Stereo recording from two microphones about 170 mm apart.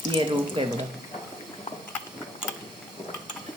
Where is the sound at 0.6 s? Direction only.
30° right (ahead or behind).